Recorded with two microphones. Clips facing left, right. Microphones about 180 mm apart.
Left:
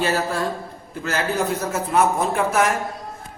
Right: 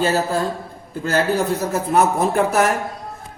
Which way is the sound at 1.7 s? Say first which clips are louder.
Right 2 dB; 40° right (ahead or behind).